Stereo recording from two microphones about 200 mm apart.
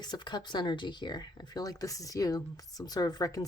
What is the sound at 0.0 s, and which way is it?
Speech, 20° left (ahead or behind).